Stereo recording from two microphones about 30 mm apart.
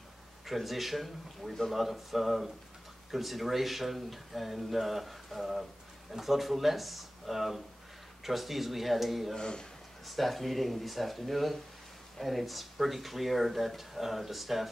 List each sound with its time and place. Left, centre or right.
0.5 s speech: centre
9.4 s speech: left
10.0 s speech: centre